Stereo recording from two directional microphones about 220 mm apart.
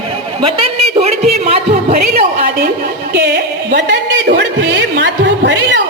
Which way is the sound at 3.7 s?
40° right (ahead or behind).